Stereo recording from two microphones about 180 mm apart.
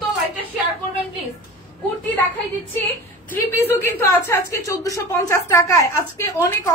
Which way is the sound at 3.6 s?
15° left (ahead or behind).